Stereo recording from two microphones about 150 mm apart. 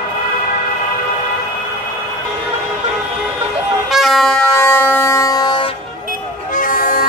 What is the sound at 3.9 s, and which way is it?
Music, centre (ahead or behind).